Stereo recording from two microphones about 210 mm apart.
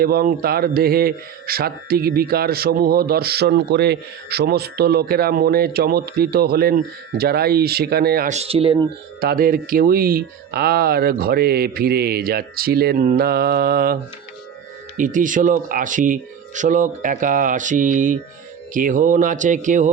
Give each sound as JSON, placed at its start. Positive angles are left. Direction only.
{"t": 0.0, "sound": "speech", "side_deg": -45}
{"t": 9.2, "sound": "speech", "side_deg": -45}